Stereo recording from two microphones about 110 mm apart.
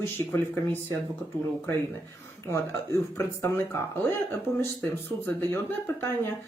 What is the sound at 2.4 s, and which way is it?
Speech, 25° left (ahead or behind).